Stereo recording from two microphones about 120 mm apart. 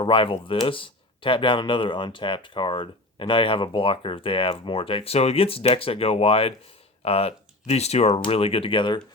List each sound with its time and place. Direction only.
0.0 s speech: 45° left (ahead or behind)